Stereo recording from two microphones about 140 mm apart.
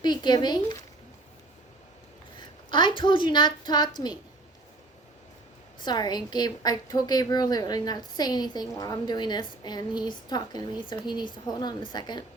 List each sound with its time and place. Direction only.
0.0 s speech: 30° left (ahead or behind)
2.6 s a woman's voice: 35° left (ahead or behind)
5.8 s a woman's voice: 30° left (ahead or behind)